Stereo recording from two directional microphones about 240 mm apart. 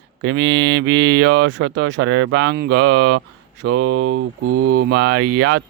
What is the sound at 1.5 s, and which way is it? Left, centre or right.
Speech, right.